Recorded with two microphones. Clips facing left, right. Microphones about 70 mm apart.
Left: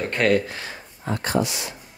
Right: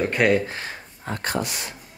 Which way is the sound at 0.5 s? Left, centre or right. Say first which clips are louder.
Right 1 dB; right.